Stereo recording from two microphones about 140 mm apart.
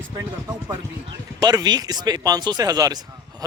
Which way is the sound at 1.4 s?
30° right (ahead or behind).